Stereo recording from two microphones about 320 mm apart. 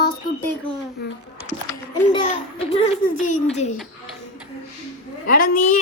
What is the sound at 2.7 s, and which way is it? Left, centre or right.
Speech, centre.